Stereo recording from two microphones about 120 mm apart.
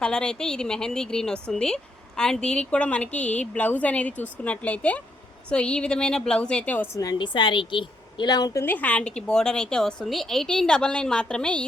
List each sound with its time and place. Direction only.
0.0 s a woman's voice: 5° left (ahead or behind)
6.9 s a woman's voice: 30° left (ahead or behind)
8.6 s a woman's voice: 15° left (ahead or behind)